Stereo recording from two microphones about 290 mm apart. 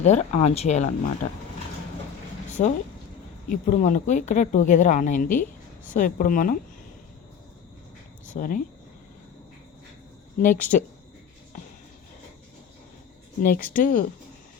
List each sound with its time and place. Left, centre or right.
0.0 s speech: left
2.6 s speech: left
8.3 s speech: left
10.3 s speech: left
13.4 s speech: left